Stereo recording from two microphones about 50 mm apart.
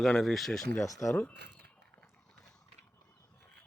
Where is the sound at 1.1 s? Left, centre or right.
Left.